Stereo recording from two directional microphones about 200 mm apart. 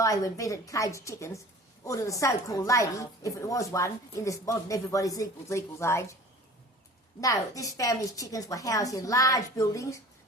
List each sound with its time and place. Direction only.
0.0 s a woman's voice: 15° left (ahead or behind)
7.2 s a woman's voice: 15° left (ahead or behind)